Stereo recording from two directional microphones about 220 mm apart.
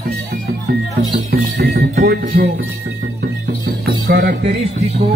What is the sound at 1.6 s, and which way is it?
Music, 45° right (ahead or behind).